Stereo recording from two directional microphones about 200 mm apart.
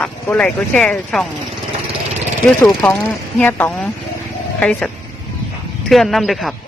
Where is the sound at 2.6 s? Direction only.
5° left (ahead or behind).